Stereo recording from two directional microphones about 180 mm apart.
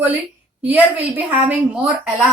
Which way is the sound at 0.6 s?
10° right (ahead or behind).